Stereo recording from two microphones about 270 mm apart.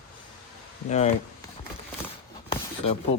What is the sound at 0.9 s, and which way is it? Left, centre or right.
Speech, left.